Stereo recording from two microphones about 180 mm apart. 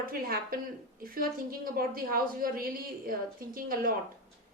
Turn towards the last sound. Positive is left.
turn(degrees=-50)  # may be behind; listen again after turning